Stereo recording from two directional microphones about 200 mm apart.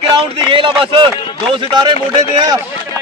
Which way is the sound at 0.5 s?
25° right (ahead or behind).